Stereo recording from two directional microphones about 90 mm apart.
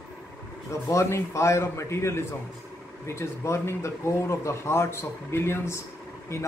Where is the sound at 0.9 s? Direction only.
30° left (ahead or behind).